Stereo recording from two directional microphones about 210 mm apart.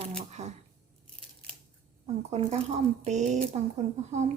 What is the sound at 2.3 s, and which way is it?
Speech, 30° right (ahead or behind).